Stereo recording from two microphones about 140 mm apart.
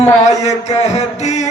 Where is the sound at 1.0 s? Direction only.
55° left (ahead or behind).